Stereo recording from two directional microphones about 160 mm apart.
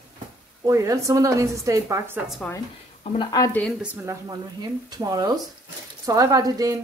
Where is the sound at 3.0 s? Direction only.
40° left (ahead or behind).